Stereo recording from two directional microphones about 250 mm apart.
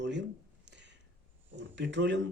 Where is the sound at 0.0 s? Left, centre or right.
Right.